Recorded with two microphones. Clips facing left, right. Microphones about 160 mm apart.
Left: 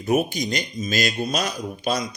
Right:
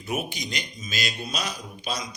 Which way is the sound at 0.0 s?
45° left (ahead or behind).